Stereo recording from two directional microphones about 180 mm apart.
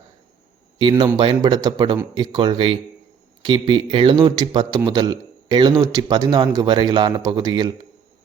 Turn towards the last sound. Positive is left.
turn(degrees=-25)  # may be behind; listen again after turning